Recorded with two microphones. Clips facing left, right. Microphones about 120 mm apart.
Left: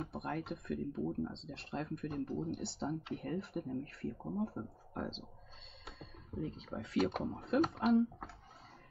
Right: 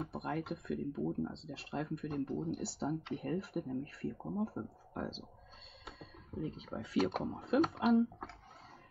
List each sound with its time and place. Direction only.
0.0 s speech: centre (ahead or behind)